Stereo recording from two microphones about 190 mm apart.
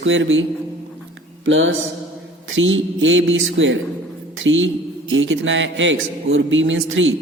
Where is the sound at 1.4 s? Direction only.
80° right.